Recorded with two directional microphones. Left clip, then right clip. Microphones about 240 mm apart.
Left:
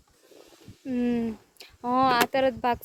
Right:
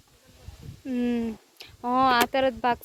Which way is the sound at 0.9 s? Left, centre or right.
Centre.